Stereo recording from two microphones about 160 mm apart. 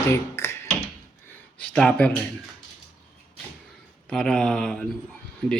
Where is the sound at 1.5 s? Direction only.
5° left (ahead or behind).